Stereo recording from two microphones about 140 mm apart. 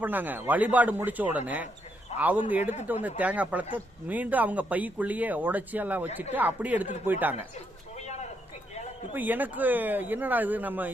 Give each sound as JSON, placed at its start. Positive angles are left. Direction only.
{"t": 0.0, "sound": "speech", "side_deg": -10}
{"t": 7.9, "sound": "a sound", "side_deg": 55}
{"t": 9.1, "sound": "speech", "side_deg": -10}